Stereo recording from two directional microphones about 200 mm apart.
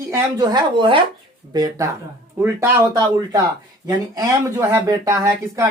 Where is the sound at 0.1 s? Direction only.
20° right (ahead or behind).